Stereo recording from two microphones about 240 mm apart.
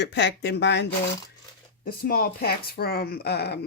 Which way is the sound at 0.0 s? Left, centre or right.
Left.